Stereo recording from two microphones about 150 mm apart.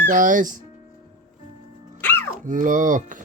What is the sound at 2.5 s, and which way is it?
Speech, 60° right (ahead or behind).